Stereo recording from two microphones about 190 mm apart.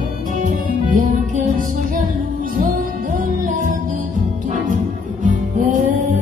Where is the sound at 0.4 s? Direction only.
45° right (ahead or behind).